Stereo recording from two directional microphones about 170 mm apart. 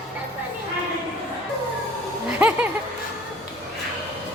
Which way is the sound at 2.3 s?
10° right (ahead or behind).